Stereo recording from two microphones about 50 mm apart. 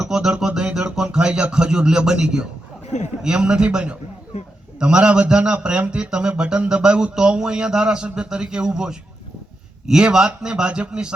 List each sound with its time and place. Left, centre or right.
0.0 s a man's voice: centre